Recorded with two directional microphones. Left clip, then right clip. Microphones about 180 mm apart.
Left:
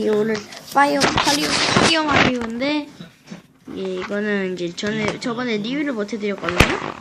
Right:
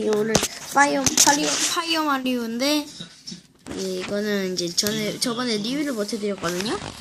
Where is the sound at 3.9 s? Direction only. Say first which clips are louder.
Left 3 dB; 5° right (ahead or behind).